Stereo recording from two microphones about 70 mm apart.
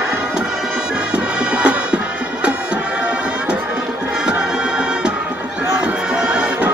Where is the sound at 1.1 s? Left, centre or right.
Centre.